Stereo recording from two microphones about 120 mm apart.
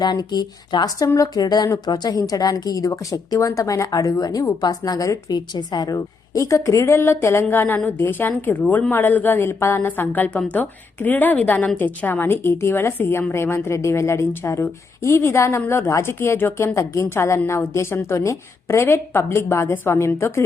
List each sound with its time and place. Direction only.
0.0 s speech: 35° left (ahead or behind)